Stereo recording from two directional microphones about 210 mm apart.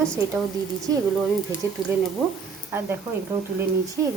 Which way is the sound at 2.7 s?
10° right (ahead or behind).